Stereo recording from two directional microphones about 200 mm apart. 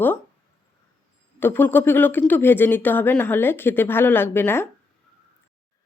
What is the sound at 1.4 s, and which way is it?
Speech, 10° left (ahead or behind).